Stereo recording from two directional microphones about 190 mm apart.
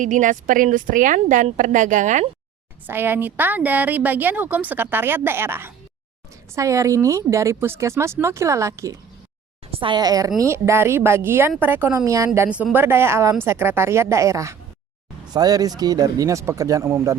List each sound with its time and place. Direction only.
0.0 s a woman's voice: 40° right (ahead or behind)
2.8 s a woman's voice: 10° right (ahead or behind)